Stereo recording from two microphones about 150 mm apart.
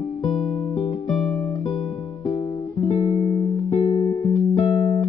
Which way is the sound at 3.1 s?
45° left (ahead or behind).